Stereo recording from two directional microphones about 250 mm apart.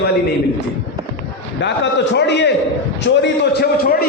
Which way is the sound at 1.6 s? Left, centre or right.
Left.